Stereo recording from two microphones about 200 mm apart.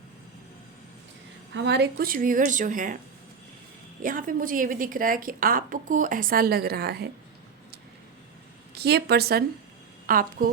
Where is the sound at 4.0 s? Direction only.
45° right (ahead or behind).